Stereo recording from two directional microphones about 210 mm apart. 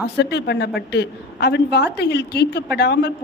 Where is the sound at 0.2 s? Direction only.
55° left (ahead or behind).